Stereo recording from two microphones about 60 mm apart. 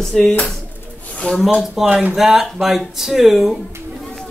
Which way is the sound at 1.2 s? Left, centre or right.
Left.